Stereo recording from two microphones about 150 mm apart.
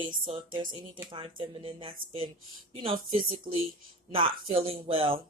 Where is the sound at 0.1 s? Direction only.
30° right (ahead or behind).